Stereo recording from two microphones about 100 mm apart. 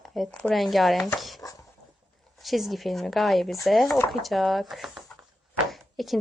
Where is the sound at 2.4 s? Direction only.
Centre (ahead or behind).